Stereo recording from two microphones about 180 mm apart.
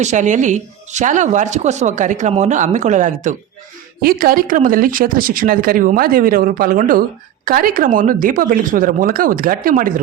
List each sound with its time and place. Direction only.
0.0 s speech: 40° right (ahead or behind)
4.0 s speech: 55° right (ahead or behind)